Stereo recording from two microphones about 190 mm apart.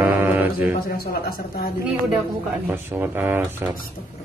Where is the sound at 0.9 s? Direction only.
50° left (ahead or behind).